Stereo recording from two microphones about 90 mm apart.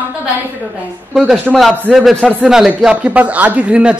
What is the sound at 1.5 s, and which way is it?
A man's voice, 10° right (ahead or behind).